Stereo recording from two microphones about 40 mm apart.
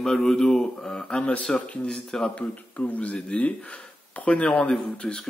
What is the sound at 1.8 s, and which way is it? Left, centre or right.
Speech, centre.